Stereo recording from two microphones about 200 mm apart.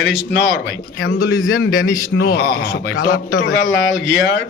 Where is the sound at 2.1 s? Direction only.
55° left (ahead or behind).